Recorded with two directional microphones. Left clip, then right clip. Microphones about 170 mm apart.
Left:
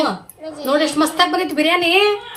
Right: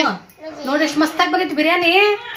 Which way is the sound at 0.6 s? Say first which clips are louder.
Left 2 dB; 25° left (ahead or behind).